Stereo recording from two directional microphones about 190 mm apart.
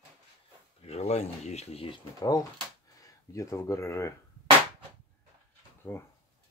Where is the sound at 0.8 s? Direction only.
35° left (ahead or behind); by 4.1 s 15° left (ahead or behind).